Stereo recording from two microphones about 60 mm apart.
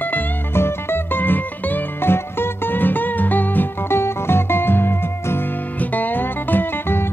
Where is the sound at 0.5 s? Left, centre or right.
Left.